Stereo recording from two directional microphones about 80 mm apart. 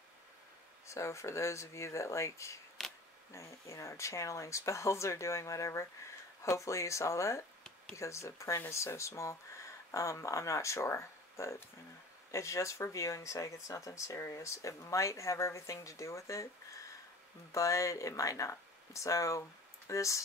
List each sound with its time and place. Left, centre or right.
0.8 s speech: left
17.5 s speech: left